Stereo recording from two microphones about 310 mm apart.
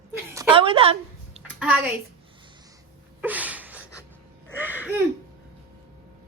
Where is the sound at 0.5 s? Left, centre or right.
Centre.